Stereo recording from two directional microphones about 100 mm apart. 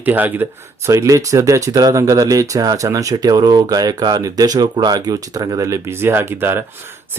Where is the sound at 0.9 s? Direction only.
30° right (ahead or behind).